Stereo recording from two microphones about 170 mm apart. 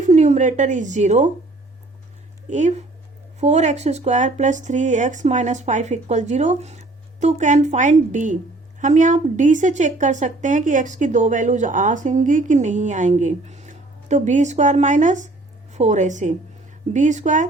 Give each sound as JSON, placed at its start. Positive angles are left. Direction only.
{"t": 0.0, "sound": "a woman's voice", "side_deg": -45}
{"t": 2.5, "sound": "a woman's voice", "side_deg": -45}